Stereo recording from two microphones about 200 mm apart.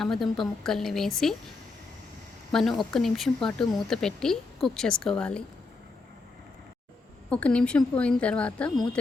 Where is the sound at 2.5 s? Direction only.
Centre (ahead or behind).